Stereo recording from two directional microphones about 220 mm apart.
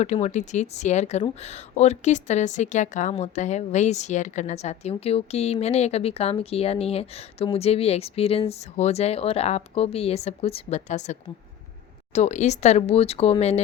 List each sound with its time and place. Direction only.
0.0 s speech: 30° left (ahead or behind)